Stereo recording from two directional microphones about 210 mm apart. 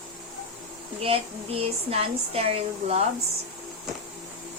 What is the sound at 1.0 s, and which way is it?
Speech, 25° right (ahead or behind).